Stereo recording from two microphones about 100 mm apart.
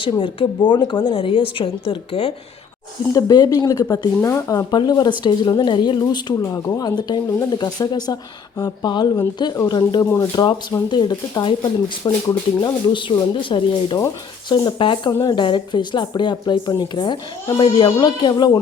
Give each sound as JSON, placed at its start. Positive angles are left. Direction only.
{"t": 0.2, "sound": "a woman's voice", "side_deg": 55}
{"t": 3.1, "sound": "speech", "side_deg": 40}
{"t": 6.4, "sound": "a woman's voice", "side_deg": 30}
{"t": 15.2, "sound": "speech", "side_deg": 50}